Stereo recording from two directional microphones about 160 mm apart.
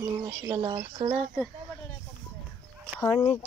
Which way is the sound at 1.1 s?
Centre (ahead or behind).